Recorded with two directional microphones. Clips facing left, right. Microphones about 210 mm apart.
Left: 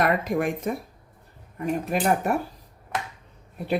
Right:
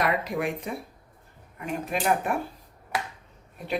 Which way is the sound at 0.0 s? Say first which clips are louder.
Left 3 dB; 50° left (ahead or behind).